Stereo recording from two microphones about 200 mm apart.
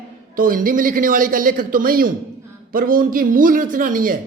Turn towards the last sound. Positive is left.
turn(degrees=-45)  # may be behind; listen again after turning